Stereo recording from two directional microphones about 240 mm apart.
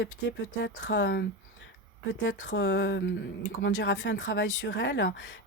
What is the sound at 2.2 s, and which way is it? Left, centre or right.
Speech, left.